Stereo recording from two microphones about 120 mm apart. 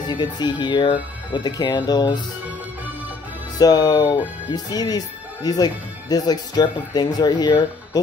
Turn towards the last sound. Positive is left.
turn(degrees=35)  # may be behind; listen again after turning